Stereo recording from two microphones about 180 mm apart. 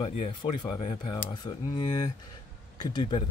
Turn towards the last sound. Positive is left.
turn(degrees=25)  # may be behind; listen again after turning